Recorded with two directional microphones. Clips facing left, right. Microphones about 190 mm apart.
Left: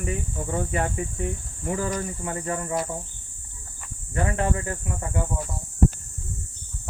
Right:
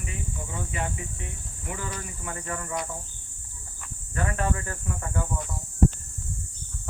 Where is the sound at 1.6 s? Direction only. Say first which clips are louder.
Left 8 dB; 35° left (ahead or behind).